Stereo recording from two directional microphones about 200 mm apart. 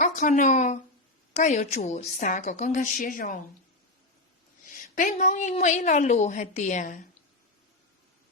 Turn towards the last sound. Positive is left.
turn(degrees=40)  # may be behind; listen again after turning